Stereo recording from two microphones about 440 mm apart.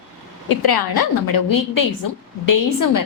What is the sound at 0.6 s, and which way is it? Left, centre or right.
A woman's voice, left.